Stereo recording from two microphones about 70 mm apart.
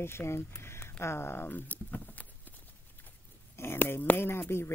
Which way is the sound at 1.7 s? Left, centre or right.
Left.